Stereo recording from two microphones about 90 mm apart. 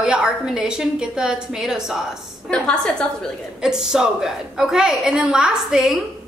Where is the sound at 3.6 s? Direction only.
5° right (ahead or behind).